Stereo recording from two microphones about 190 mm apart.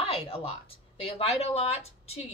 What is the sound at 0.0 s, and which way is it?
A woman's voice, 30° left (ahead or behind).